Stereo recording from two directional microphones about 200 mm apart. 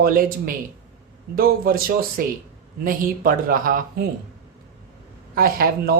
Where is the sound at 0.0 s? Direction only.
45° right (ahead or behind).